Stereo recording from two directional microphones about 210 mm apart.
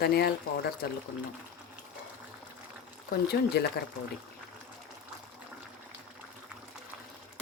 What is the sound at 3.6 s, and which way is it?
Speech, 50° left (ahead or behind).